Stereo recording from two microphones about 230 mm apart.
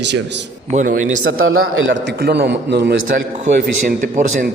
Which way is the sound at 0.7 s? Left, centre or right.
Right.